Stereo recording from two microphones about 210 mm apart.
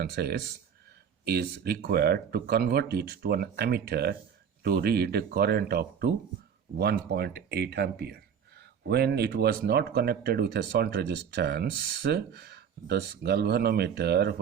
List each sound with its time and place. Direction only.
0.0 s speech: 50° right (ahead or behind)